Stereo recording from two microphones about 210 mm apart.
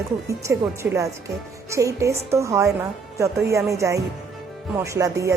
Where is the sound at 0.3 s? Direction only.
15° right (ahead or behind).